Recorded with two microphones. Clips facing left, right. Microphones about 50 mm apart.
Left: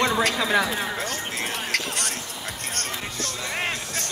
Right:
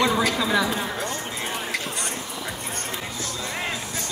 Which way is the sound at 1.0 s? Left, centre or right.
Left.